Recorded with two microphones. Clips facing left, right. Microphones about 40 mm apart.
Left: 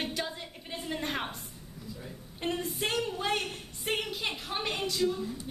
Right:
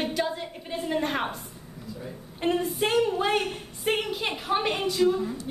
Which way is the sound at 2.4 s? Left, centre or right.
Centre.